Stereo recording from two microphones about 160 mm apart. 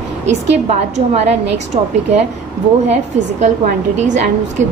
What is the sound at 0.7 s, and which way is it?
A woman's voice, 45° right (ahead or behind).